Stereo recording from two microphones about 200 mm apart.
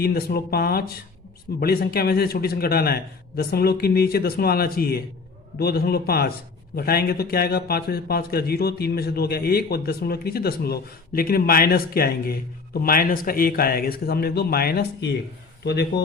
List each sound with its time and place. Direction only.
0.0 s a man's voice: 50° left (ahead or behind)